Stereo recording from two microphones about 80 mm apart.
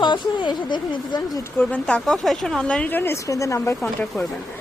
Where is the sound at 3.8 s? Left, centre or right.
Centre.